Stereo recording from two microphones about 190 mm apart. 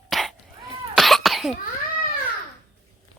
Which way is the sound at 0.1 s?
Centre (ahead or behind).